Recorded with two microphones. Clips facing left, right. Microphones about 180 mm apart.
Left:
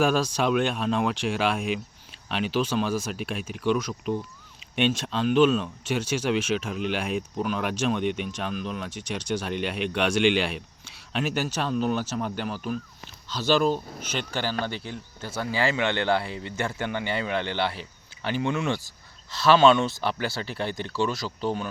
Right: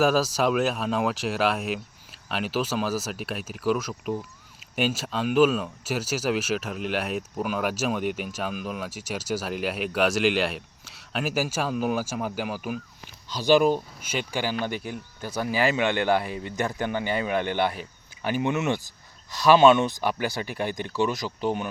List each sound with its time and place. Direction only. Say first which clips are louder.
0.0 s speech: right 1 dB; 5° right (ahead or behind)